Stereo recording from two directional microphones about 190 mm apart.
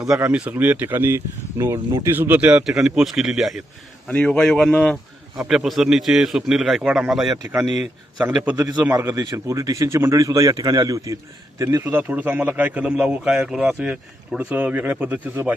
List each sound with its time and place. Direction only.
0.1 s a man's voice: 5° right (ahead or behind)